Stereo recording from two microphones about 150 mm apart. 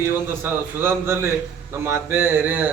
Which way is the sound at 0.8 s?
15° right (ahead or behind).